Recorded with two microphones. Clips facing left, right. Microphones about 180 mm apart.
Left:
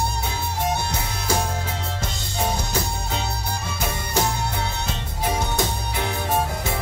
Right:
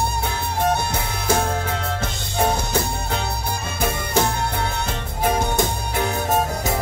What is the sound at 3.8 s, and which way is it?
Music, 55° right (ahead or behind).